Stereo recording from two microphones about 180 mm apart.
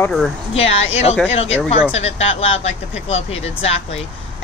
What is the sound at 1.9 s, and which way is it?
Speech, 35° left (ahead or behind).